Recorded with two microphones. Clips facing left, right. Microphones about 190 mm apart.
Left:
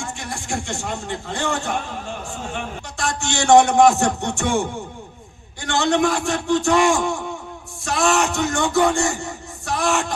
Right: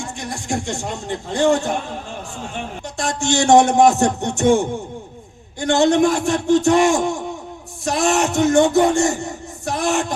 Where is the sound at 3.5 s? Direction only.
40° right (ahead or behind).